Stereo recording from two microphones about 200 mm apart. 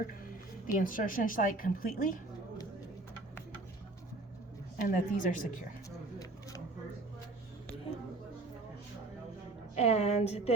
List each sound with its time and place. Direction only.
0.7 s a woman's voice: 45° left (ahead or behind)
4.8 s a woman's voice: 40° left (ahead or behind)
9.7 s a woman's voice: 35° left (ahead or behind)